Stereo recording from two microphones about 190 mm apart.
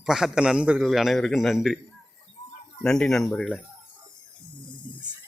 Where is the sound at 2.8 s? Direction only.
5° left (ahead or behind).